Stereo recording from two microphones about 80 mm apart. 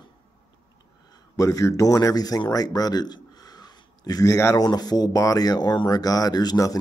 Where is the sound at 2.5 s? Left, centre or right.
Left.